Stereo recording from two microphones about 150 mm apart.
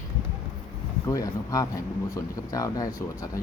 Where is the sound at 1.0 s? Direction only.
20° left (ahead or behind).